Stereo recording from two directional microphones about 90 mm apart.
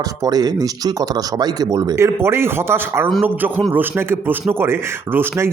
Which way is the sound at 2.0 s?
30° right (ahead or behind).